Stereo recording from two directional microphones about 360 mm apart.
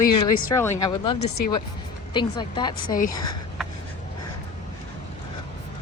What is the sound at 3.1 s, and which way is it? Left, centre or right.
Speech, left.